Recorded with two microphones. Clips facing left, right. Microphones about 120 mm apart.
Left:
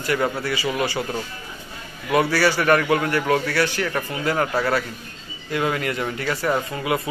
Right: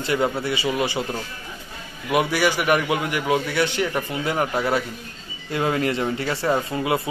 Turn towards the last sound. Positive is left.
turn(degrees=-25)  # may be behind; listen again after turning